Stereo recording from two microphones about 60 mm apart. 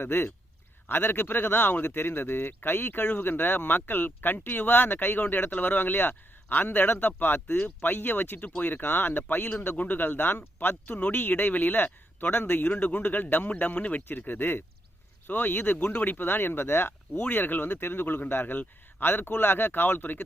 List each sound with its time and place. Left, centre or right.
0.0 s a man's voice: left